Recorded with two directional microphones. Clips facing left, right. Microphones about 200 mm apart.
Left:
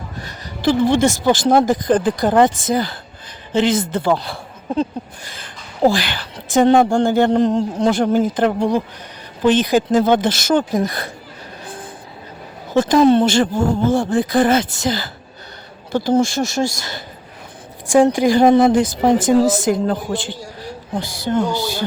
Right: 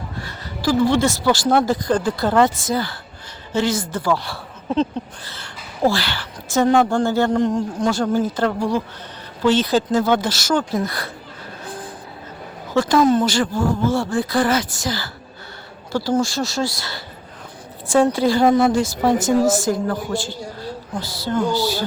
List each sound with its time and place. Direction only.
0.2 s a sound: 20° left (ahead or behind)
1.2 s a woman's voice: 20° left (ahead or behind)
6.7 s speech: 30° left (ahead or behind)
7.0 s a woman's voice: 15° left (ahead or behind)
7.3 s a man's voice: 30° left (ahead or behind)
7.9 s a woman's voice: 20° left (ahead or behind)
12.7 s a woman's voice: 20° left (ahead or behind)
17.8 s a woman's voice: 15° left (ahead or behind)